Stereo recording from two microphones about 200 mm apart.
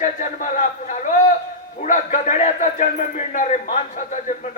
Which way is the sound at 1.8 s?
40° left (ahead or behind).